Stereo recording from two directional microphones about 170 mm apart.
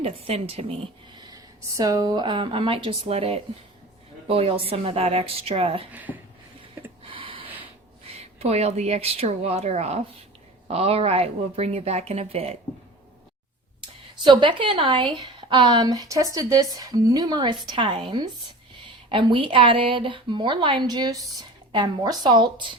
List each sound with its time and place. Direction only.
0.0 s speech: 35° right (ahead or behind)
1.3 s speech: 20° right (ahead or behind)
5.9 s speech: 10° right (ahead or behind)
7.0 s a sound: 30° right (ahead or behind)
8.2 s speech: 40° right (ahead or behind)
14.3 s a woman's voice: 30° right (ahead or behind)